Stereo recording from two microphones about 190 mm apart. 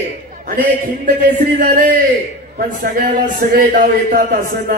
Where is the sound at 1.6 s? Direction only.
45° right (ahead or behind).